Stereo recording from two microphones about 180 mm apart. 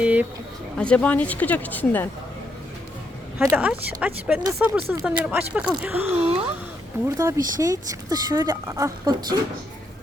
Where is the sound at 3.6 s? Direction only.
5° right (ahead or behind).